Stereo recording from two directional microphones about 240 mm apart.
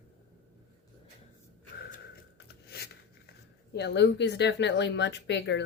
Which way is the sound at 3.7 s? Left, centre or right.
Left.